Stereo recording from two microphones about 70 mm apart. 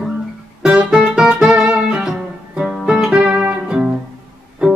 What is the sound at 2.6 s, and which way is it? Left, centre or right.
Music, centre.